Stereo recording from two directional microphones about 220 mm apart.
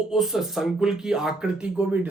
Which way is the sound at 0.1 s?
Centre (ahead or behind).